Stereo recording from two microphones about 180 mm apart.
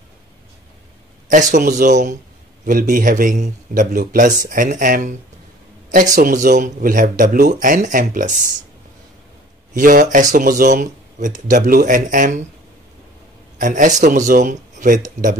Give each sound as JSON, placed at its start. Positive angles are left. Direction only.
{"t": 1.3, "sound": "speech", "side_deg": -45}
{"t": 6.1, "sound": "speech", "side_deg": -50}
{"t": 9.8, "sound": "speech", "side_deg": -50}
{"t": 13.6, "sound": "speech", "side_deg": -45}